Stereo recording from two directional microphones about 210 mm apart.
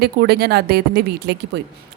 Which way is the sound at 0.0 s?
50° right (ahead or behind).